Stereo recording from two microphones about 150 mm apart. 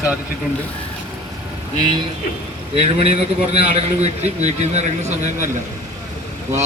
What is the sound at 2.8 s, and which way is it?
A man's voice, 40° right (ahead or behind).